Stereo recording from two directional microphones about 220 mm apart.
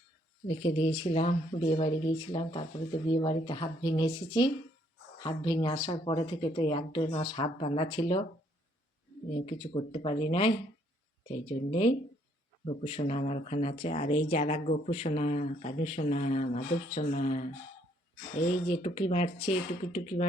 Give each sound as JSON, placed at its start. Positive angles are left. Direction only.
{"t": 0.4, "sound": "speech", "side_deg": 25}
{"t": 9.3, "sound": "speech", "side_deg": 25}
{"t": 18.7, "sound": "speech", "side_deg": 25}